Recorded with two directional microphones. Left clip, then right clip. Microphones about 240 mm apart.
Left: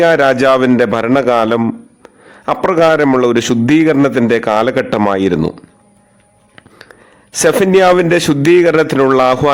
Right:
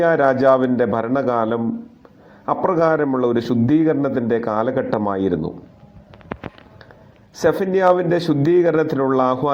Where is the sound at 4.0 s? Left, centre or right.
Left.